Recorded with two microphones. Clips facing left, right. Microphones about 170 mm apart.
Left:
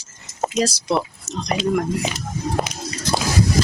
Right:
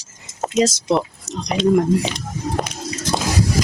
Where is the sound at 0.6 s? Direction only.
20° right (ahead or behind).